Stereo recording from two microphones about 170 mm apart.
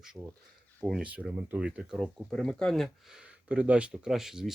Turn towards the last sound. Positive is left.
turn(degrees=-5)  # may be behind; listen again after turning